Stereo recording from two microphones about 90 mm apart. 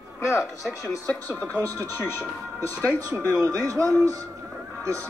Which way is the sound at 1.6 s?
40° right (ahead or behind).